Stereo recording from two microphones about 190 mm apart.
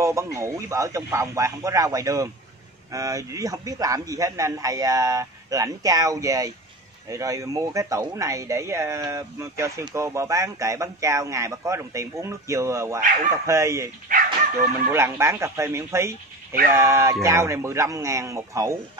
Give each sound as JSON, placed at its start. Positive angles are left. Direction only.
{"t": 0.0, "sound": "speech", "side_deg": -15}
{"t": 14.1, "sound": "dog", "side_deg": -45}
{"t": 14.9, "sound": "speech", "side_deg": -15}